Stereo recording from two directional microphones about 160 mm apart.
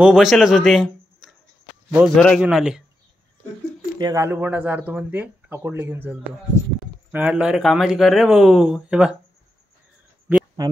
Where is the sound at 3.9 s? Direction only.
25° right (ahead or behind).